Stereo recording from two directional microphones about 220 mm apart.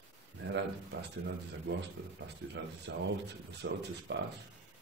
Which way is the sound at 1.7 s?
55° right (ahead or behind).